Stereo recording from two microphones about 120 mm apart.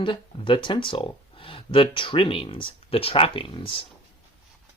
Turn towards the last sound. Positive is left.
turn(degrees=45)  # may be behind; listen again after turning